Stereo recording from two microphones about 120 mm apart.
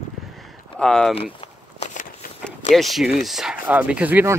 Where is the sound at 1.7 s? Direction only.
90° left.